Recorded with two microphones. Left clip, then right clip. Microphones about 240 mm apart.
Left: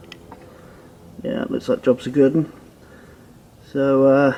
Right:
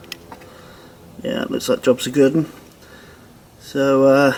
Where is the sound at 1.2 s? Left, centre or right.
Centre.